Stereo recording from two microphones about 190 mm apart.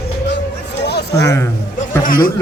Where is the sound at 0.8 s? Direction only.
60° left (ahead or behind).